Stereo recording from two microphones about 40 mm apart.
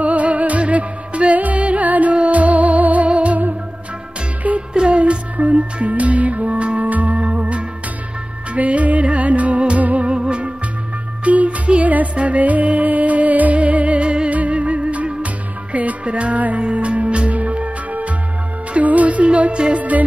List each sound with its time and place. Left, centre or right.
0.0 s music: right
4.6 s music: right
7.2 s music: right
11.2 s music: right
19.8 s music: right